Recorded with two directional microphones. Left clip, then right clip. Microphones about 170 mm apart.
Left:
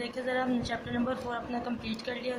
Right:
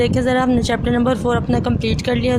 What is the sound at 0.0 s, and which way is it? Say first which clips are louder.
Speech: right 15 dB; 55° right (ahead or behind).